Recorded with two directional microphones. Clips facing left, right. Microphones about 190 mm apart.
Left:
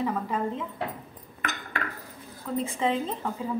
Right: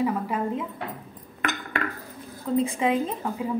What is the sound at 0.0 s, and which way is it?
Speech, 10° right (ahead or behind).